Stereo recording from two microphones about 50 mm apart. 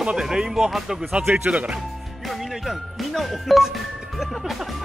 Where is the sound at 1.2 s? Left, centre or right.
Right.